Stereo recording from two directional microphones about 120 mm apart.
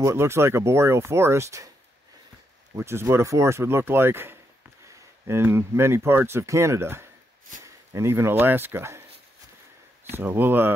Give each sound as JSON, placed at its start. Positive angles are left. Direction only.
{"t": 0.0, "sound": "speech", "side_deg": -20}
{"t": 2.7, "sound": "speech", "side_deg": -20}
{"t": 10.1, "sound": "speech", "side_deg": -20}